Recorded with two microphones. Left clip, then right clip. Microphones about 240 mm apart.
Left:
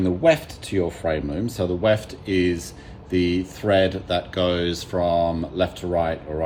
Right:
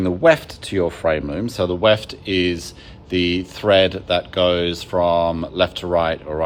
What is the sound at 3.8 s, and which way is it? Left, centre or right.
Speech, centre.